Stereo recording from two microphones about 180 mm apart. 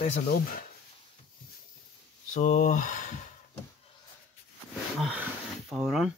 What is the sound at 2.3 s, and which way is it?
Speech, 45° left (ahead or behind).